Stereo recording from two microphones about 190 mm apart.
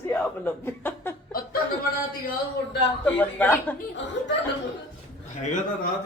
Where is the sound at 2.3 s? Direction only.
60° left (ahead or behind).